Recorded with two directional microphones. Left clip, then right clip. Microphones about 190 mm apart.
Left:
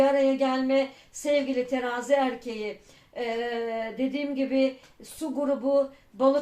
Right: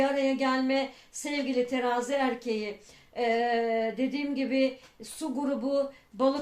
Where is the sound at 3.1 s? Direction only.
40° right (ahead or behind).